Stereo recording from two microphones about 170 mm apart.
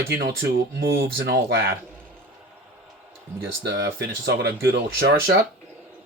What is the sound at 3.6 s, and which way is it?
Speech, 85° right.